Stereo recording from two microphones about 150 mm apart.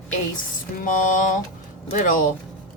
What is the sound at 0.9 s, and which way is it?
A woman's voice, 60° left (ahead or behind).